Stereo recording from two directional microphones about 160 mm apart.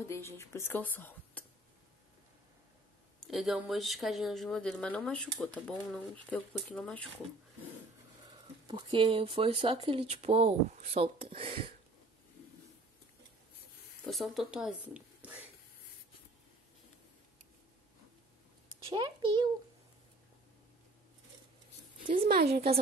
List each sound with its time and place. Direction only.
0.1 s speech: 15° left (ahead or behind)
3.3 s speech: centre (ahead or behind)
8.6 s speech: 30° right (ahead or behind)
14.0 s speech: centre (ahead or behind)
18.9 s a child's voice: 30° right (ahead or behind)
22.0 s a sound: 35° right (ahead or behind)
22.3 s speech: 85° right